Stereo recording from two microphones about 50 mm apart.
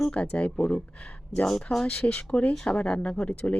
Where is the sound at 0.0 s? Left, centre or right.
Left.